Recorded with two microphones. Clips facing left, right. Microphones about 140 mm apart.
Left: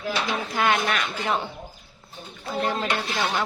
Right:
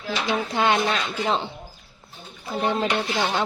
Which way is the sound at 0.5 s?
25° right (ahead or behind).